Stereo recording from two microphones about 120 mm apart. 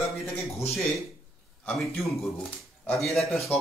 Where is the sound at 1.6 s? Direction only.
Centre (ahead or behind).